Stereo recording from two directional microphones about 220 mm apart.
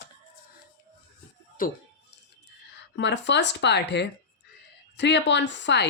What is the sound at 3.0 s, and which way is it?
Speech, 55° left (ahead or behind).